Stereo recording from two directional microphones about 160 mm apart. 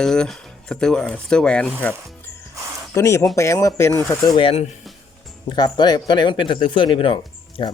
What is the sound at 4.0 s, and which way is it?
Speech, centre (ahead or behind).